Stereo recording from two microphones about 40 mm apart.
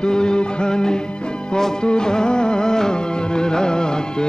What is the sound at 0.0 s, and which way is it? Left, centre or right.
Music, left.